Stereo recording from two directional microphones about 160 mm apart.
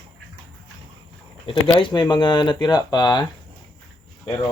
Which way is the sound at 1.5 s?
30° left (ahead or behind).